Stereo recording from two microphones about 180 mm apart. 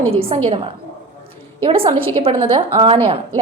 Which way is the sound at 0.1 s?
30° right (ahead or behind).